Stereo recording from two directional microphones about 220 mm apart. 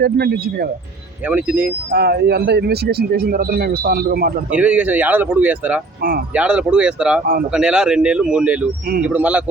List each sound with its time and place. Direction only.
0.0 s speech: 45° right (ahead or behind)
1.2 s speech: 5° right (ahead or behind)
1.9 s speech: 45° right (ahead or behind)
4.5 s speech: 5° right (ahead or behind)
6.0 s speech: 40° right (ahead or behind)
6.3 s speech: 5° right (ahead or behind)